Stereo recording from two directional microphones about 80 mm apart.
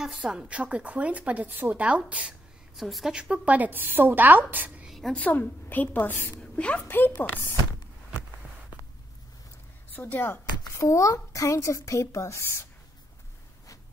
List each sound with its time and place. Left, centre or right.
0.0 s a woman's voice: centre
2.8 s a woman's voice: centre; by 4.8 s right
4.8 s a sound: centre
5.1 s a woman's voice: left
6.4 s a sound: centre
7.2 s a woman's voice: left
9.9 s a woman's voice: left
10.7 s speech: left